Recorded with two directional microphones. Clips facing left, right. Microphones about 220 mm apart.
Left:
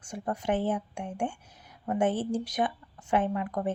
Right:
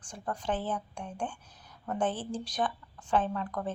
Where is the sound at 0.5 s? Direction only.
10° left (ahead or behind).